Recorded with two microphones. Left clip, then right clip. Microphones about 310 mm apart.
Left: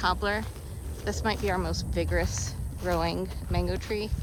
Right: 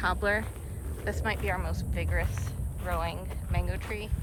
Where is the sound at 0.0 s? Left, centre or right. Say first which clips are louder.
Left 1 dB; centre.